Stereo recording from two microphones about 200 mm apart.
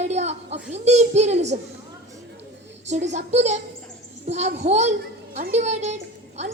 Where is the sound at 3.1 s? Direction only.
35° right (ahead or behind).